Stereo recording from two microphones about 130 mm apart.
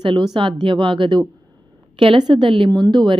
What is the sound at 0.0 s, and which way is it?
A woman's voice, 40° right (ahead or behind).